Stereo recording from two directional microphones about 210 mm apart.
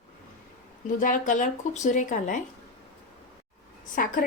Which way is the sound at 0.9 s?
40° left (ahead or behind).